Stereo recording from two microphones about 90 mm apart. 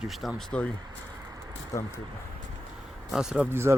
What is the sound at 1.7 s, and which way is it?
Speech, 35° left (ahead or behind).